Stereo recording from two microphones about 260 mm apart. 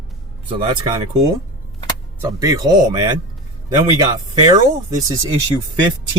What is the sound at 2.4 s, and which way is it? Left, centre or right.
Speech, centre.